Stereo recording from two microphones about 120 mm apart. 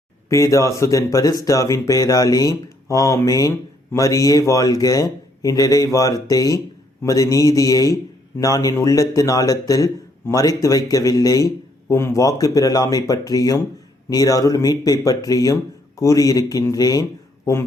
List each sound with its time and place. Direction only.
0.3 s speech: 25° left (ahead or behind)